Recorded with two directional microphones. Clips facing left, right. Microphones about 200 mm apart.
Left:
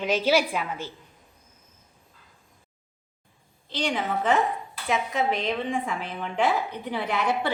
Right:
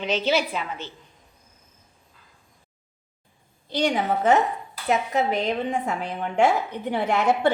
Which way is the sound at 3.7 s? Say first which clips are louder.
Right 4 dB; 40° right (ahead or behind).